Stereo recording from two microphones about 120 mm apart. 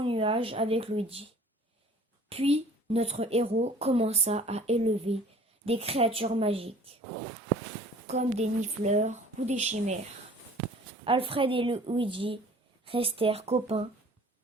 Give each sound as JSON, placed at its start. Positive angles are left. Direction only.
{"t": 0.0, "sound": "speech", "side_deg": -50}
{"t": 2.3, "sound": "a woman's voice", "side_deg": -60}
{"t": 8.0, "sound": "speech", "side_deg": -65}
{"t": 11.0, "sound": "speech", "side_deg": -50}